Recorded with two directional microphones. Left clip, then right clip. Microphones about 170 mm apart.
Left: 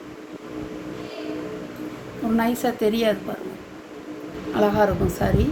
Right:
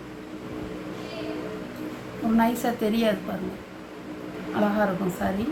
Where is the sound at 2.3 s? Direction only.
50° left (ahead or behind).